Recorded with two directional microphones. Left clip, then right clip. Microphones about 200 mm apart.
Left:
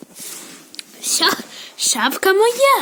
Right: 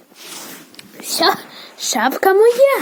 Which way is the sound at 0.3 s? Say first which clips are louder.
Right 4 dB; 55° right (ahead or behind).